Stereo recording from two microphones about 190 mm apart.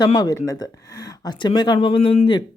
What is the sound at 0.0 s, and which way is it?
Speech, 20° left (ahead or behind).